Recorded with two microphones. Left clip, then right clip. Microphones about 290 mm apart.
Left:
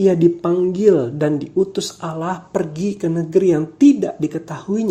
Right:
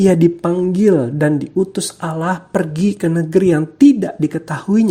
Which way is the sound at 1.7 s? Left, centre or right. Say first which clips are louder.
Right 2 dB; right.